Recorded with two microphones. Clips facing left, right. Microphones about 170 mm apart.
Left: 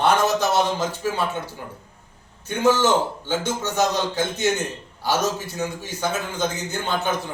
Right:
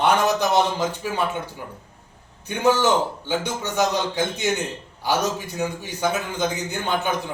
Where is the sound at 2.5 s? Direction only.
15° right (ahead or behind).